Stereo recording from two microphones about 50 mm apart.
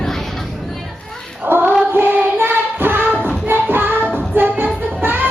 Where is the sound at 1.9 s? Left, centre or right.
Right.